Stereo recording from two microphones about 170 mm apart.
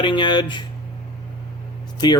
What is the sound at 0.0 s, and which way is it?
Speech, 30° left (ahead or behind).